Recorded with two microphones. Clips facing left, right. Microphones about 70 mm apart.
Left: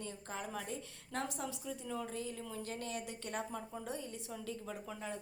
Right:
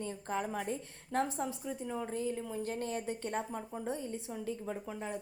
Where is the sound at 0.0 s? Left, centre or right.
Right.